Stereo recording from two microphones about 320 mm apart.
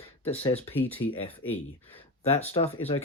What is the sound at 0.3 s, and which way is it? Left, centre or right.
Speech, centre.